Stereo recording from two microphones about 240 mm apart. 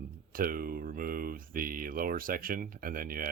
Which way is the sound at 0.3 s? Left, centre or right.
Right.